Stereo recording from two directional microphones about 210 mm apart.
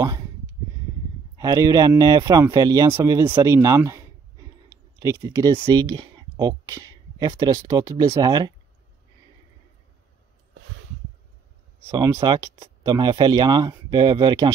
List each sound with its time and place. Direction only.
1.3 s speech: 15° right (ahead or behind)
11.9 s speech: 15° right (ahead or behind)